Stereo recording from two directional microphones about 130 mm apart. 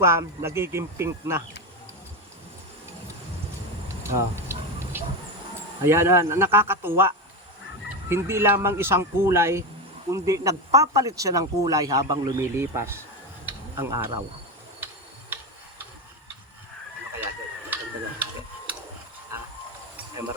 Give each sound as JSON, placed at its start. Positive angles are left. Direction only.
{"t": 0.0, "sound": "speech", "side_deg": -20}
{"t": 4.0, "sound": "a sound", "side_deg": -20}
{"t": 5.8, "sound": "speech", "side_deg": -20}
{"t": 8.1, "sound": "speech", "side_deg": -20}
{"t": 13.4, "sound": "a sound", "side_deg": -20}
{"t": 17.7, "sound": "tick-tock", "side_deg": -15}